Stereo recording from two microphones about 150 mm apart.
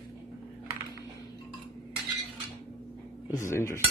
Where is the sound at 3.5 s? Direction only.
20° left (ahead or behind).